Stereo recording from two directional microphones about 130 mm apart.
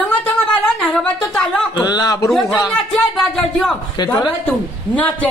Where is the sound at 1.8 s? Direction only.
30° left (ahead or behind).